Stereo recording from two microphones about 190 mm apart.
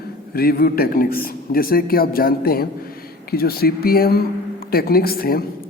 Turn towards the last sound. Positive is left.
turn(degrees=50)  # may be behind; listen again after turning